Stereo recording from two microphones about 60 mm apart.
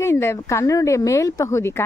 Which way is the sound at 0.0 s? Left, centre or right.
Left.